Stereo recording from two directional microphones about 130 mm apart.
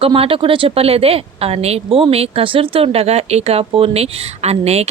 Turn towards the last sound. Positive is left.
turn(degrees=-55)  # may be behind; listen again after turning